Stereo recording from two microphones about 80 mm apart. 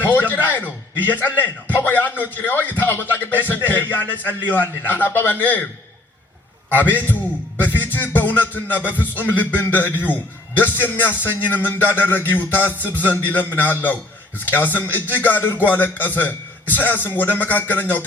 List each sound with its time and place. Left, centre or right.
0.0 s a sound: left
1.0 s a man's voice: left
6.7 s a man's voice: left